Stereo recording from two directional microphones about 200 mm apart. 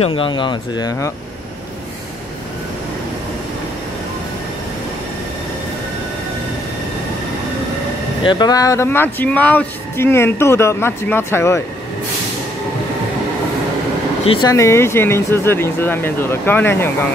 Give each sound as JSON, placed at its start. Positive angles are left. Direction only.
{"t": 0.0, "sound": "speech", "side_deg": 25}
{"t": 8.2, "sound": "speech", "side_deg": 20}
{"t": 14.2, "sound": "speech", "side_deg": 25}
{"t": 14.5, "sound": "speech", "side_deg": 15}